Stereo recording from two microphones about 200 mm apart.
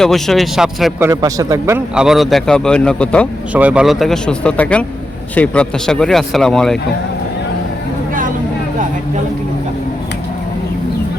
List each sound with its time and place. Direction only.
0.0 s speech: centre (ahead or behind)
1.0 s a man's voice: 20° right (ahead or behind)
2.0 s speech: centre (ahead or behind)
3.5 s speech: 5° right (ahead or behind)